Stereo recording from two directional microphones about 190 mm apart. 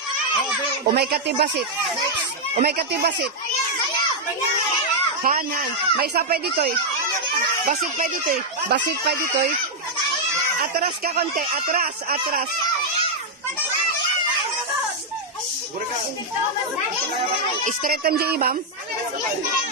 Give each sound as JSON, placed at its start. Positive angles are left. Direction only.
{"t": 0.9, "sound": "speech", "side_deg": -55}
{"t": 2.6, "sound": "speech", "side_deg": -55}
{"t": 5.2, "sound": "speech", "side_deg": -45}
{"t": 10.6, "sound": "speech", "side_deg": -55}
{"t": 17.6, "sound": "speech", "side_deg": -50}